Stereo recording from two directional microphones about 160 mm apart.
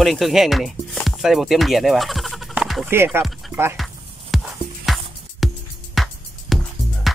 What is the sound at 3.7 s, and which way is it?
Music, centre (ahead or behind).